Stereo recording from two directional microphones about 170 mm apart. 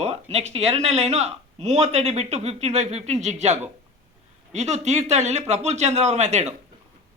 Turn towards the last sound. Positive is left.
turn(degrees=-40)  # may be behind; listen again after turning